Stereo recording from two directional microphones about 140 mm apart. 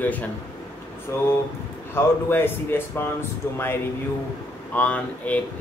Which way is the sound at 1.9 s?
15° left (ahead or behind).